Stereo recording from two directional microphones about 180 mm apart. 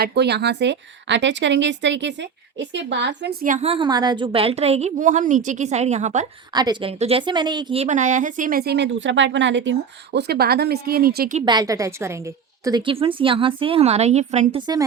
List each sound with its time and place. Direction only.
0.0 s speech: 65° right (ahead or behind)
3.4 s a woman's voice: 45° right (ahead or behind)
3.7 s a woman's voice: 25° right (ahead or behind); by 6.2 s 40° right (ahead or behind)
6.5 s a woman's voice: 25° right (ahead or behind); by 11.3 s 55° right (ahead or behind)
11.4 s a woman's voice: 20° right (ahead or behind); by 14.6 s 40° right (ahead or behind)